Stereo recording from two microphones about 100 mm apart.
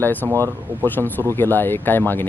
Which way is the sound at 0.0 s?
15° left (ahead or behind).